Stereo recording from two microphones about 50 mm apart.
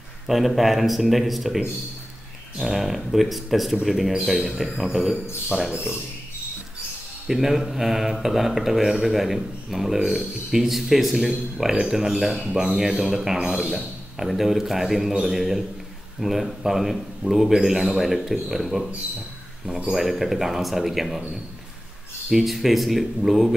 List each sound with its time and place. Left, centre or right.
0.3 s speech: centre
2.6 s speech: centre
7.2 s speech: centre
19.9 s speech: centre
22.3 s speech: centre